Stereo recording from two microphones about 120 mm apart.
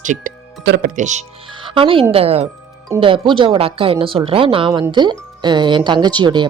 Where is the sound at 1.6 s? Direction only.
45° right (ahead or behind).